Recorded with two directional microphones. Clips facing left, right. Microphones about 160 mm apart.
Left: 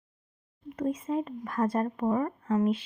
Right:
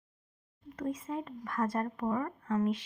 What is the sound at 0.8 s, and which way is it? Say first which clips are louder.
Speech: left 6 dB; 25° left (ahead or behind).